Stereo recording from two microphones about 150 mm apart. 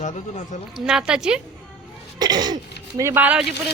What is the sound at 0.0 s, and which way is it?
Speech, 50° left (ahead or behind).